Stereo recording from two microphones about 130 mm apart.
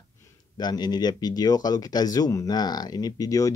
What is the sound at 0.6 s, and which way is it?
Speech, 30° left (ahead or behind).